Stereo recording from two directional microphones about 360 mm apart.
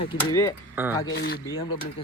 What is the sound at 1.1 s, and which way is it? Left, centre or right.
Speech, left.